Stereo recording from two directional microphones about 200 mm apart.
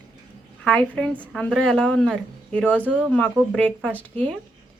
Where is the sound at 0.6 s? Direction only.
5° left (ahead or behind).